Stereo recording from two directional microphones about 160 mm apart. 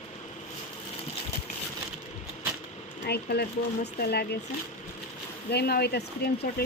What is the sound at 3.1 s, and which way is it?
Speech, 90° left.